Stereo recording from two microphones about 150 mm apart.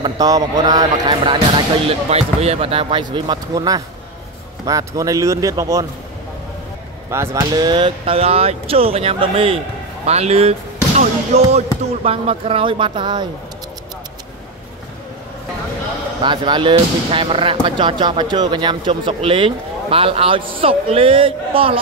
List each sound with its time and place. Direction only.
0.0 s speech: 25° right (ahead or behind)
1.9 s speech: 45° right (ahead or behind); by 5.9 s 20° right (ahead or behind)
7.1 s speech: 20° right (ahead or behind)
16.2 s speech: 30° right (ahead or behind)